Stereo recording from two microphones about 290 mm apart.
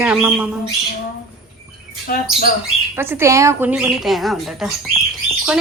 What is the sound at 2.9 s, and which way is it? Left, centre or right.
Speech, centre.